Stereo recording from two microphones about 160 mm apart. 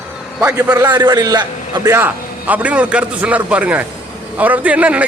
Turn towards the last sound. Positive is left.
turn(degrees=-10)  # may be behind; listen again after turning